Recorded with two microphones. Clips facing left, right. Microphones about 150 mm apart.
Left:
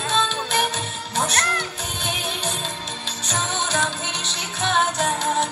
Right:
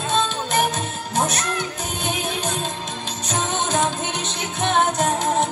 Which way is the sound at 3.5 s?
50° right (ahead or behind).